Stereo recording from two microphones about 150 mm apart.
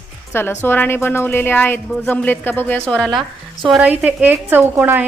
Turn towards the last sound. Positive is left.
turn(degrees=-15)  # may be behind; listen again after turning